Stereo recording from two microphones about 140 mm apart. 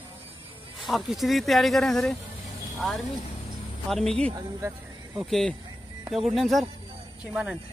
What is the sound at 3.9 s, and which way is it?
Speech, 5° left (ahead or behind).